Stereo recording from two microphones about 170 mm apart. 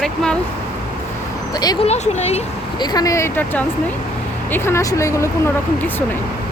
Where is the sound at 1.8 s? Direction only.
40° left (ahead or behind).